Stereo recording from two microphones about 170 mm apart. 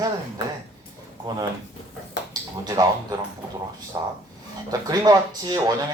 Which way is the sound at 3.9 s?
25° right (ahead or behind).